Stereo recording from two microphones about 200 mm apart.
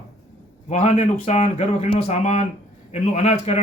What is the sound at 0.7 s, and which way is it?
A man's voice, 35° left (ahead or behind).